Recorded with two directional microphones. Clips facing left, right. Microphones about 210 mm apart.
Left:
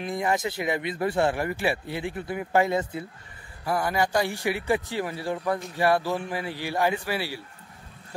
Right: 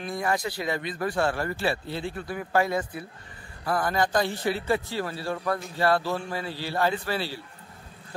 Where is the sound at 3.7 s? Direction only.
10° left (ahead or behind).